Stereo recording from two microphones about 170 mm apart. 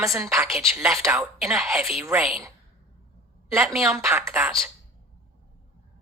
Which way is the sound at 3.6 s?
5° right (ahead or behind).